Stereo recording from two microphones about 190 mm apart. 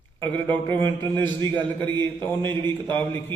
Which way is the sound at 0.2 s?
10° left (ahead or behind).